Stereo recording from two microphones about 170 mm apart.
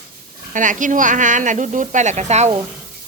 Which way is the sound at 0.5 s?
50° right (ahead or behind).